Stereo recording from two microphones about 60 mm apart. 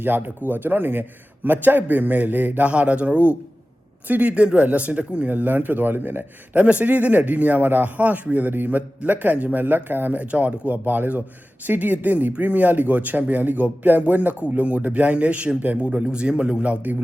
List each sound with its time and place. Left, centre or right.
0.0 s speech: right; by 16.7 s centre